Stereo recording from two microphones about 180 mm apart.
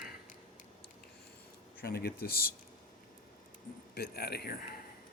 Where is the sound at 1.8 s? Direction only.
55° left (ahead or behind).